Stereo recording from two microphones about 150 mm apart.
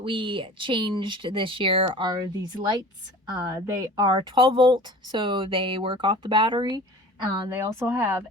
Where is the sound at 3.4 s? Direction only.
25° right (ahead or behind).